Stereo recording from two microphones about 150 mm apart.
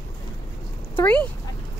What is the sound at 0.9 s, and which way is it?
Speech, 10° left (ahead or behind).